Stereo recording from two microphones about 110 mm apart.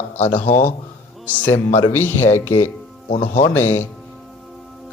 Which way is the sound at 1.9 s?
20° left (ahead or behind).